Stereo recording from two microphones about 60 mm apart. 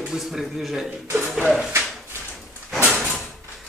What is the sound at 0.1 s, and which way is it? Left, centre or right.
Speech, centre.